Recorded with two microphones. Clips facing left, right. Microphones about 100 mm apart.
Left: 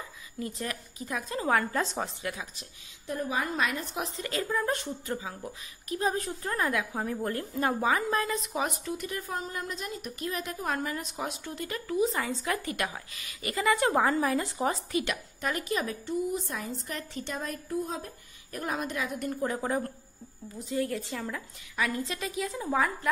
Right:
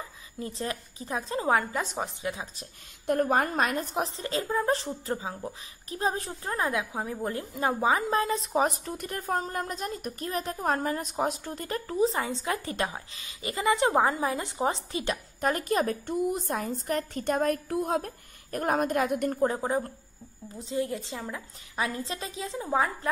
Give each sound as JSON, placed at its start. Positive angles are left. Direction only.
{"t": 0.4, "sound": "a woman's voice", "side_deg": -30}
{"t": 3.1, "sound": "a woman's voice", "side_deg": -55}
{"t": 15.4, "sound": "a woman's voice", "side_deg": -40}
{"t": 19.4, "sound": "a woman's voice", "side_deg": -25}
{"t": 21.7, "sound": "a woman's voice", "side_deg": -30}